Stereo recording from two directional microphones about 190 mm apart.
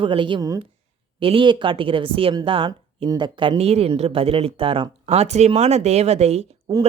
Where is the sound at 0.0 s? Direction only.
25° right (ahead or behind).